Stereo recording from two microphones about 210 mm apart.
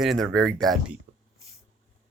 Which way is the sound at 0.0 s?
Centre (ahead or behind).